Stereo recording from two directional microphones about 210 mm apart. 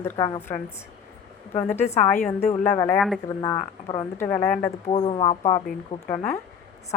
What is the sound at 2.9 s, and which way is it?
Speech, centre (ahead or behind).